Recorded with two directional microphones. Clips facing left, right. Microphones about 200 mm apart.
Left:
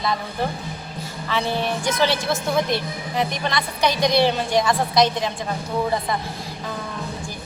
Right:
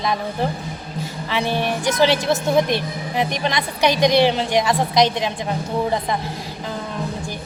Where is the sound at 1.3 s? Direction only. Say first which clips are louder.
Right 1 dB; 15° right (ahead or behind).